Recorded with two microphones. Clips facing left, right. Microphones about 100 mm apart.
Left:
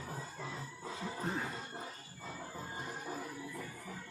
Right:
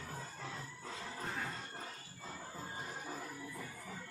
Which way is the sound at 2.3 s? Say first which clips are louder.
Left 2 dB; 5° left (ahead or behind).